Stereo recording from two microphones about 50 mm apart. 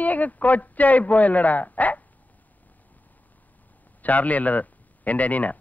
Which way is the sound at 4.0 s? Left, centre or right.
Left.